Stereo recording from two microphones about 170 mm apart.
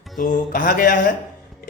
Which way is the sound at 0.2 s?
55° left (ahead or behind).